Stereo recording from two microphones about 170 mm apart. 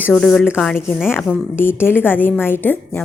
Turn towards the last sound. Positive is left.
turn(degrees=10)  # may be behind; listen again after turning